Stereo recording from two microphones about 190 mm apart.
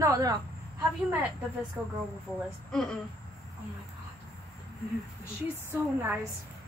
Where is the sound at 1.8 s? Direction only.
5° right (ahead or behind).